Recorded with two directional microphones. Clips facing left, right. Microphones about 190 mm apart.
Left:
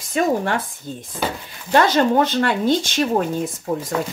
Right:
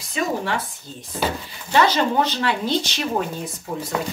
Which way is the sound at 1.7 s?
50° left (ahead or behind).